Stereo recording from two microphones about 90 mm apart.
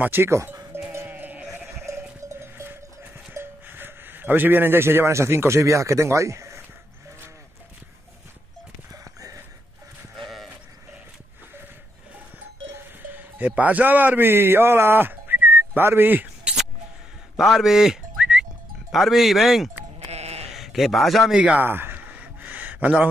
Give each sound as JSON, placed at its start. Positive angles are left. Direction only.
{"t": 0.0, "sound": "speech", "side_deg": -25}
{"t": 0.9, "sound": "sheep", "side_deg": -25}
{"t": 1.9, "sound": "sheep", "side_deg": -35}
{"t": 3.3, "sound": "speech", "side_deg": -25}
{"t": 8.9, "sound": "a sound", "side_deg": -40}
{"t": 10.1, "sound": "sheep", "side_deg": 0}
{"t": 12.7, "sound": "livestock", "side_deg": -20}
{"t": 13.6, "sound": "speech", "side_deg": -20}
{"t": 17.4, "sound": "music", "side_deg": 0}
{"t": 20.5, "sound": "a man's voice", "side_deg": -5}
{"t": 21.5, "sound": "a sound", "side_deg": -25}